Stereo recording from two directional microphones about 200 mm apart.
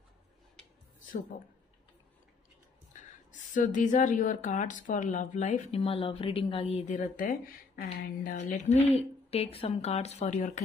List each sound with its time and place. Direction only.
1.3 s speech: 45° left (ahead or behind)
2.9 s speech: 40° left (ahead or behind)
6.9 s speech: 45° left (ahead or behind)